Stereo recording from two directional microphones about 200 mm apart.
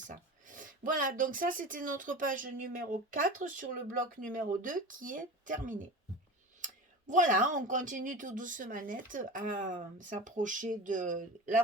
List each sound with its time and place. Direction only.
0.1 s speech: 40° right (ahead or behind)
7.1 s speech: 40° right (ahead or behind)